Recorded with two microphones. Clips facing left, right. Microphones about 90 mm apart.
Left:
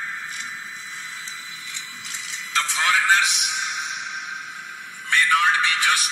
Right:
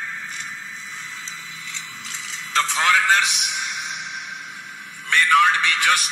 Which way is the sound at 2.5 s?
50° right (ahead or behind).